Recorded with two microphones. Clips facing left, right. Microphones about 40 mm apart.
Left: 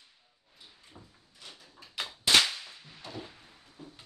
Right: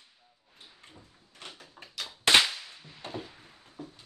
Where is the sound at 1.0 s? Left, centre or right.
Centre.